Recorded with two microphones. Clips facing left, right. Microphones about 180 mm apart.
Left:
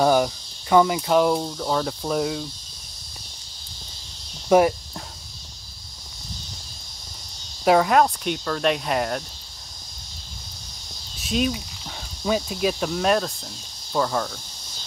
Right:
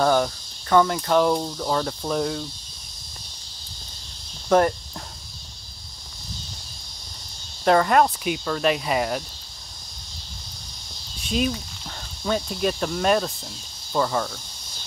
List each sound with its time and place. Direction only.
0.0 s speech: 10° left (ahead or behind)
4.5 s speech: 10° left (ahead or behind)
7.6 s speech: 5° left (ahead or behind)
11.1 s cricket: centre (ahead or behind)
12.3 s speech: 5° left (ahead or behind)